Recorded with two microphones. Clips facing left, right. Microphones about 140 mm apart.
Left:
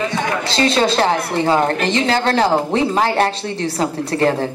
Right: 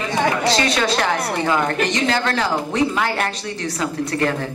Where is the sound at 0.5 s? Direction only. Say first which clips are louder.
Left 3 dB; 30° left (ahead or behind).